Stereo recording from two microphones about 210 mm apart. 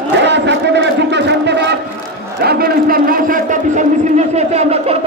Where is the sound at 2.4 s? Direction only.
50° right (ahead or behind).